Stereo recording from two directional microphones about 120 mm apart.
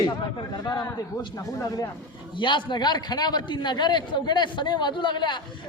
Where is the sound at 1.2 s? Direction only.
30° left (ahead or behind).